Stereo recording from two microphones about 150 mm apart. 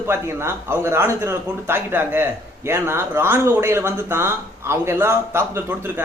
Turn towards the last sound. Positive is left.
turn(degrees=-15)  # may be behind; listen again after turning